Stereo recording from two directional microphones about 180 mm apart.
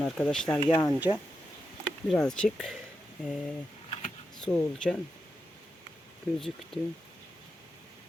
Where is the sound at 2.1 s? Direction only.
5° left (ahead or behind).